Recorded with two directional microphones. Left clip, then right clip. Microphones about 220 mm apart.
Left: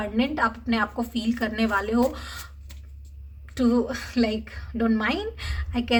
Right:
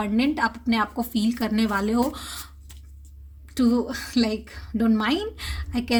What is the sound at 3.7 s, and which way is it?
Speech, 35° right (ahead or behind).